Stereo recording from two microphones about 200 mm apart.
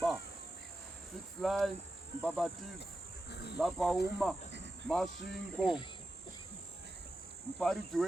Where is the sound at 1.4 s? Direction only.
Centre (ahead or behind).